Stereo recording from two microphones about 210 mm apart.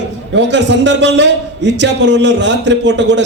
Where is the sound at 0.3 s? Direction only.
55° right (ahead or behind).